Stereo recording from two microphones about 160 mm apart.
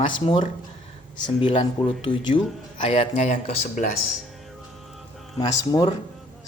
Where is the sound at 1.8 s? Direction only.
30° left (ahead or behind); by 3.8 s 50° left (ahead or behind).